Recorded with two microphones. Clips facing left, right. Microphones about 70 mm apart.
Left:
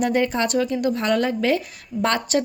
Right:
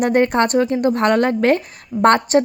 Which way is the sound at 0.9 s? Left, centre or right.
Right.